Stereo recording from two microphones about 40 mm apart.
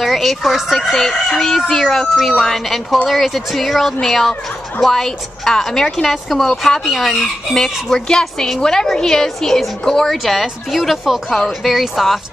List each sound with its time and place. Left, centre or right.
0.0 s fowl: centre
0.9 s speech: centre
10.1 s speech: centre
11.2 s speech: centre
11.6 s speech: centre